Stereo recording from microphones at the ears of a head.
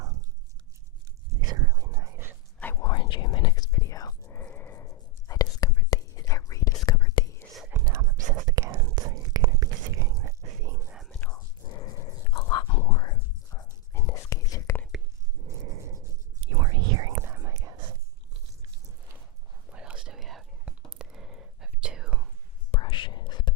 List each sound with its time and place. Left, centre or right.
1.3 s a sound: right
2.7 s a sound: left
7.6 s whispering: right
11.3 s whispering: left
15.4 s whispering: right
19.6 s whispering: right
22.7 s whispering: left